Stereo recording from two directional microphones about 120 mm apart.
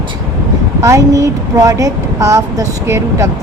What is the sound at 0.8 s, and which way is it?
Speech, 25° right (ahead or behind).